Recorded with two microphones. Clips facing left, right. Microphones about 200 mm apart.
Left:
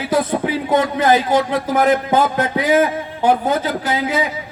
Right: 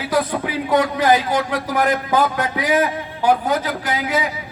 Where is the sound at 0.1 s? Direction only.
25° left (ahead or behind).